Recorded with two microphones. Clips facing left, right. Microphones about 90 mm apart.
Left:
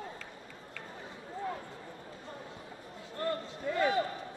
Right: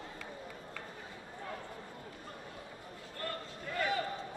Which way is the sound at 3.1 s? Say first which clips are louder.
Left 7 dB; 25° left (ahead or behind).